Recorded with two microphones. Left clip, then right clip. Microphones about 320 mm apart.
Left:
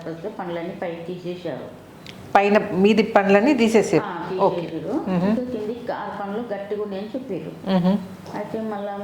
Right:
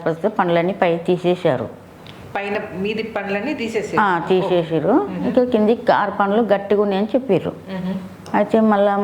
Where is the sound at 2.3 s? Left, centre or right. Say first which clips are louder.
Left 7 dB; left.